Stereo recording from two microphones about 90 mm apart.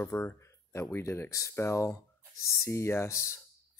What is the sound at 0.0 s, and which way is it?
Speech, 30° left (ahead or behind).